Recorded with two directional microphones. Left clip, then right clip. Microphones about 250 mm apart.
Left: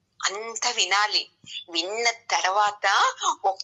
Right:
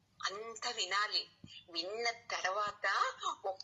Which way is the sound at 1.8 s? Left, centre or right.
Left.